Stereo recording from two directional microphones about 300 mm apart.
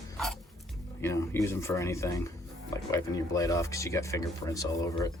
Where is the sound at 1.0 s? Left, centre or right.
Centre.